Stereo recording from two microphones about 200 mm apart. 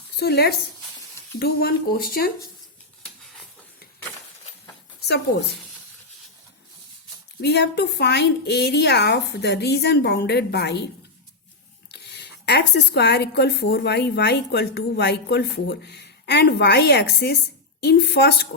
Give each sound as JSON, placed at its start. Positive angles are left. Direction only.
{"t": 0.2, "sound": "speech", "side_deg": 55}
{"t": 7.4, "sound": "speech", "side_deg": 55}
{"t": 11.9, "sound": "speech", "side_deg": 55}